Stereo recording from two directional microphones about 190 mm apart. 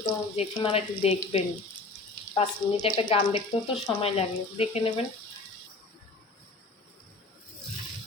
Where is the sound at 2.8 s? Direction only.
25° left (ahead or behind).